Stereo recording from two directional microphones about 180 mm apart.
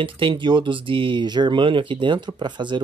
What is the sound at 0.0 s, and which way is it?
Speech, 30° right (ahead or behind).